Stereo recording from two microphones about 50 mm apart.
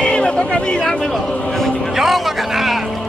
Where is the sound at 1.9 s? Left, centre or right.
Centre.